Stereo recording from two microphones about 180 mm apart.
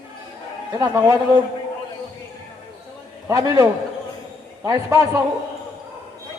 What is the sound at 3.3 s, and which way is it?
Speech, 20° right (ahead or behind).